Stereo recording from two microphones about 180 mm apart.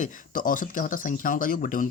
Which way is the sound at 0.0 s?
45° left (ahead or behind).